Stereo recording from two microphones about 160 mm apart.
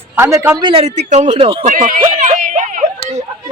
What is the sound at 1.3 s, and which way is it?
Speech, 35° right (ahead or behind).